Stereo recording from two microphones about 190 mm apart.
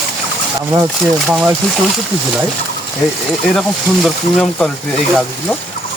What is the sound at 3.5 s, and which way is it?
Speech, centre (ahead or behind).